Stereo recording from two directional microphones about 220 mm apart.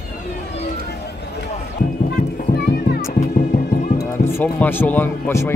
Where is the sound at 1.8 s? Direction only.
45° left (ahead or behind).